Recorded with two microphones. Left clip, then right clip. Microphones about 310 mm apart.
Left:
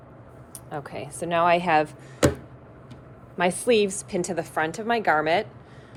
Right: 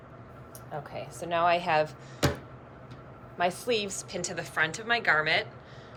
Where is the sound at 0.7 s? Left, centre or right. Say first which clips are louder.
Left 4 dB; left.